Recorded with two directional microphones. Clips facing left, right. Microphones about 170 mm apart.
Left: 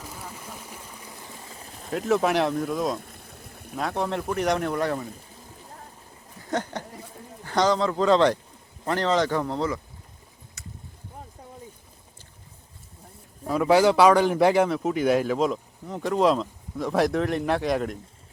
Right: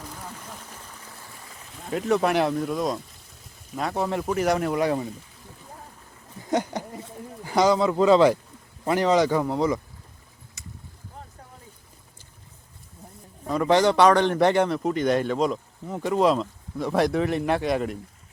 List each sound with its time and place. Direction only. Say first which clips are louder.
0.0 s boat: even; 10° left (ahead or behind); by 1.7 s 30° left (ahead or behind)
1.9 s speech: even; centre (ahead or behind)
3.0 s a sound: left 5 dB; 55° left (ahead or behind)
3.8 s speech: right 1 dB; centre (ahead or behind)
6.5 s speech: right 3 dB; 10° right (ahead or behind)
13.5 s speech: left 1 dB; 5° left (ahead or behind)